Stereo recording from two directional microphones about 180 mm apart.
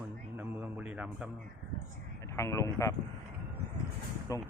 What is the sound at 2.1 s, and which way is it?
Speech, 15° left (ahead or behind).